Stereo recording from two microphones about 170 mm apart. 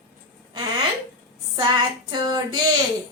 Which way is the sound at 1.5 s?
25° right (ahead or behind).